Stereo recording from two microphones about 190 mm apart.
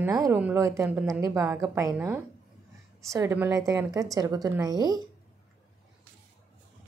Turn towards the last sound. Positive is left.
turn(degrees=-20)  # may be behind; listen again after turning